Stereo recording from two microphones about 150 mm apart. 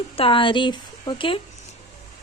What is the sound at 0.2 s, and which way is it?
Speech, 35° left (ahead or behind).